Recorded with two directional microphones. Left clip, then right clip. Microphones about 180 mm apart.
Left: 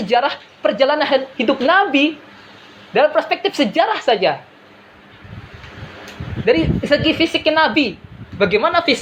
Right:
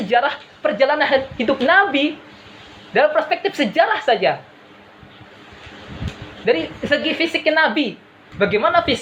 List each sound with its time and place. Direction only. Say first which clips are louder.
0.1 s a woman's voice: left 1 dB; 20° left (ahead or behind)
6.4 s a woman's voice: left 3 dB; 25° left (ahead or behind)